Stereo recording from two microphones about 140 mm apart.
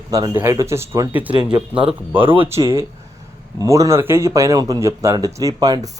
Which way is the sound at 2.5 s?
20° right (ahead or behind).